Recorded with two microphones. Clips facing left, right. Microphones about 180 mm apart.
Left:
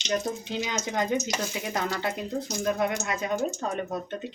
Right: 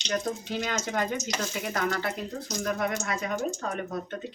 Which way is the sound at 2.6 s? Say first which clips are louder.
Left 2 dB; 25° left (ahead or behind).